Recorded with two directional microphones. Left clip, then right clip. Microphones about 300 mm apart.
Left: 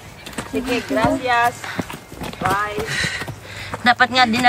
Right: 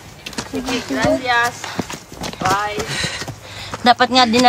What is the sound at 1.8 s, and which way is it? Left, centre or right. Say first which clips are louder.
Walk: right 3 dB; right.